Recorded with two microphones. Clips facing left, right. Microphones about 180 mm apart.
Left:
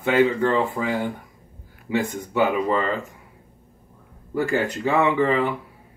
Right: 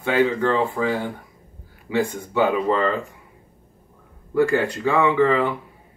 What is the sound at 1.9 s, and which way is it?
Speech, 15° left (ahead or behind).